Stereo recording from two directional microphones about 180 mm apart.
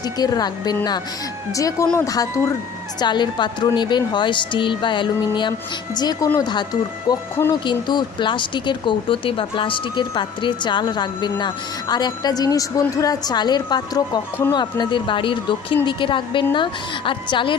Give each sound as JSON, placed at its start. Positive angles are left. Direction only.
{"t": 0.2, "sound": "speech", "side_deg": 20}